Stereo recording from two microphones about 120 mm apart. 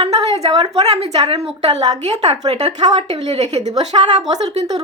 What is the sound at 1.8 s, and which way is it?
Speech, 35° right (ahead or behind).